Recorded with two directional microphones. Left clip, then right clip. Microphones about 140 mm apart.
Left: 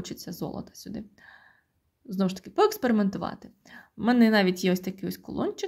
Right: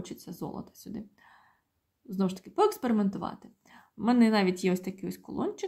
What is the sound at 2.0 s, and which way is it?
A woman's voice, 25° left (ahead or behind).